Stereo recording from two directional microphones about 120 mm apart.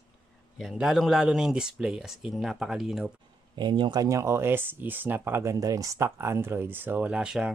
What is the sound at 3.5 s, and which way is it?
Speech, 40° right (ahead or behind).